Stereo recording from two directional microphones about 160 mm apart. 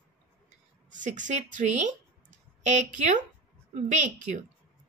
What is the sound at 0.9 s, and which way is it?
A woman's voice, 50° right (ahead or behind).